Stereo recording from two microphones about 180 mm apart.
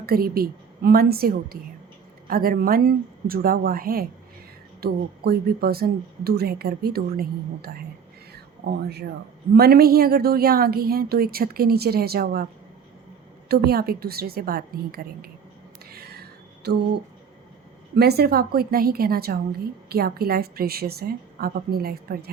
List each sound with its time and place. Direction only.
0.0 s a woman's voice: 55° right (ahead or behind)
8.3 s a sound: 60° right (ahead or behind)
9.6 s a woman's voice: 60° right (ahead or behind)
13.5 s a woman's voice: 60° right (ahead or behind)
15.9 s a sound: 60° right (ahead or behind)
16.6 s a woman's voice: 65° right (ahead or behind)
17.9 s a woman's voice: 65° right (ahead or behind)